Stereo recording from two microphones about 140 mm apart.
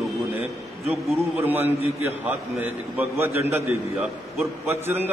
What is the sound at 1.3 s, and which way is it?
A man's voice, 15° right (ahead or behind).